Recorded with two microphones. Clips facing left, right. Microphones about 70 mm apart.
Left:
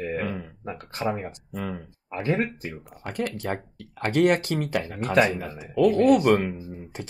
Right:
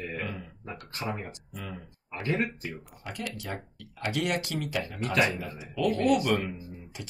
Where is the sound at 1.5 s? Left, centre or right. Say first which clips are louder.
Left 8 dB; left.